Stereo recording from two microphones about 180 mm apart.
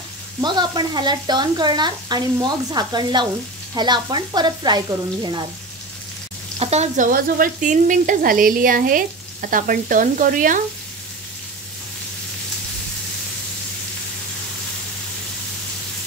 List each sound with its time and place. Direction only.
0.4 s speech: 25° right (ahead or behind)
6.6 s speech: 35° right (ahead or behind)